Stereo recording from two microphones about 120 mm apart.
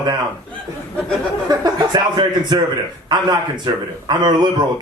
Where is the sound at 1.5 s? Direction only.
35° right (ahead or behind).